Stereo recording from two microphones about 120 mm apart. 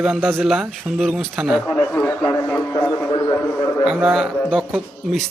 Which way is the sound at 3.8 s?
5° right (ahead or behind).